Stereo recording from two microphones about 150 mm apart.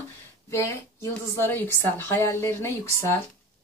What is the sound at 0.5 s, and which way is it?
Speech, 20° left (ahead or behind).